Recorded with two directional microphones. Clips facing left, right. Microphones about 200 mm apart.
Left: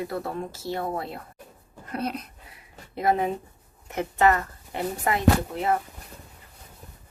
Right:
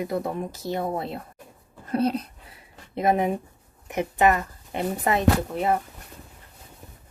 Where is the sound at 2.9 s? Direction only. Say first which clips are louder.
Right 2 dB; 20° right (ahead or behind).